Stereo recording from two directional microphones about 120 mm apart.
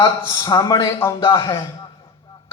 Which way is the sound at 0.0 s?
30° left (ahead or behind).